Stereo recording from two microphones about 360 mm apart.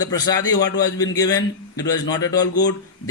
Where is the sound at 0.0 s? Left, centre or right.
Centre.